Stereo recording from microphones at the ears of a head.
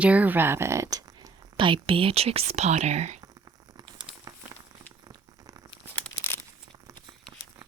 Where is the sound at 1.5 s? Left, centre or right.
Right.